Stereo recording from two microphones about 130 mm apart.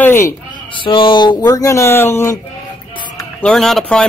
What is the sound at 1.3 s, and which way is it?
Music, 25° left (ahead or behind).